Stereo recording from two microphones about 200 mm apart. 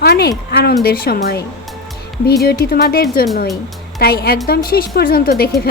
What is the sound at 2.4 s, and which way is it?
A woman's voice, 50° left (ahead or behind).